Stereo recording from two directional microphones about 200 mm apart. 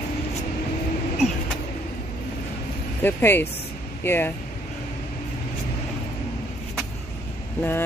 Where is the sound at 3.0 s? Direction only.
10° left (ahead or behind).